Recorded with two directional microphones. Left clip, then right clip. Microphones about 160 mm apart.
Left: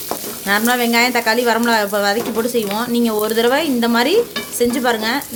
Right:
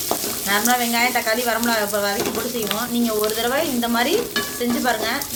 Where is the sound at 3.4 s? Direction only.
90° left.